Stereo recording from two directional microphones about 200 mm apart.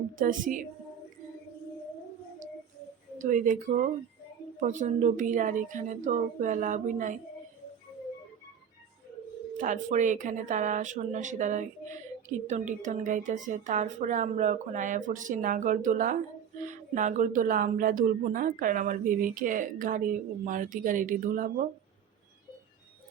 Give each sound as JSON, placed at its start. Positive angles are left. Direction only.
{"t": 0.2, "sound": "speech", "side_deg": -40}
{"t": 3.2, "sound": "speech", "side_deg": -40}
{"t": 9.6, "sound": "speech", "side_deg": -40}